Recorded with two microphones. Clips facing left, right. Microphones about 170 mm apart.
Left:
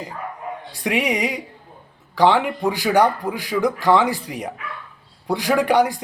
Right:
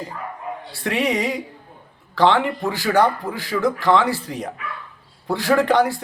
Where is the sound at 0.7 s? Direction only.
15° left (ahead or behind).